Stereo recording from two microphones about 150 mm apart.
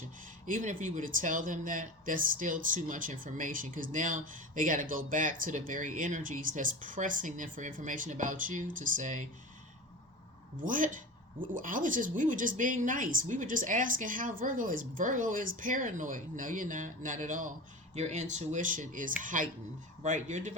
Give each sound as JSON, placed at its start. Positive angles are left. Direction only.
{"t": 0.4, "sound": "speech", "side_deg": -60}
{"t": 10.7, "sound": "speech", "side_deg": -60}
{"t": 17.9, "sound": "speech", "side_deg": -50}